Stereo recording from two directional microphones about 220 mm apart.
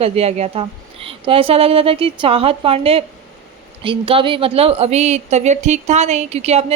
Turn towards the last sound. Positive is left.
turn(degrees=-30)  # may be behind; listen again after turning